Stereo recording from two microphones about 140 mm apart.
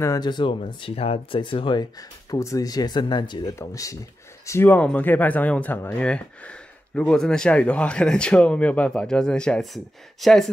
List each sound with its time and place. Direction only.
0.0 s speech: 25° left (ahead or behind); by 10.5 s centre (ahead or behind)